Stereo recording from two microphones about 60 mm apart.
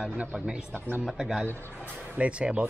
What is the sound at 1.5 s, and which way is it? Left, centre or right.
Speech, left.